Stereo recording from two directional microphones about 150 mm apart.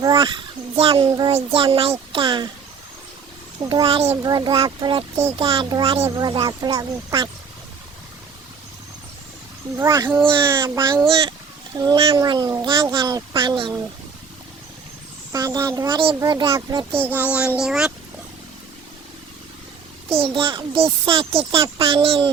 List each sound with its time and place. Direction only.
0.0 s a child's voice: 30° right (ahead or behind)
3.7 s a child's voice: 35° right (ahead or behind)
4.1 s a child's voice: 25° right (ahead or behind)
9.7 s a child's voice: 20° right (ahead or behind)
11.1 s a child's voice: 35° right (ahead or behind)
15.3 s a child's voice: 25° right (ahead or behind); by 17.9 s 5° right (ahead or behind)
20.1 s a child's voice: 40° right (ahead or behind)